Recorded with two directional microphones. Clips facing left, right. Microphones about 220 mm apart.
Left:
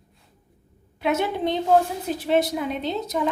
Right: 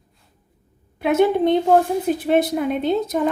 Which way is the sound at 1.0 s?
55° right (ahead or behind).